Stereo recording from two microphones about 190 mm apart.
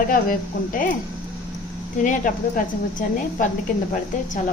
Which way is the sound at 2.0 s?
45° left (ahead or behind).